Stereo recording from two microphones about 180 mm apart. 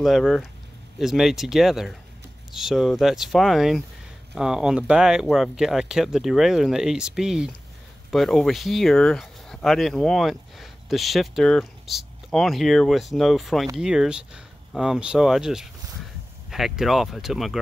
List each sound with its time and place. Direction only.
0.0 s speech: centre (ahead or behind)